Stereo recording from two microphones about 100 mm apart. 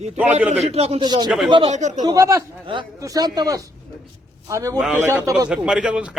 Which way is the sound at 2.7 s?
60° right (ahead or behind).